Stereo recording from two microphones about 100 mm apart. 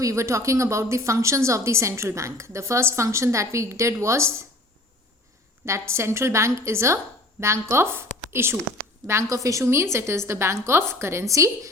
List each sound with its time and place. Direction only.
0.0 s a woman's voice: 30° right (ahead or behind)
5.6 s a woman's voice: 30° right (ahead or behind)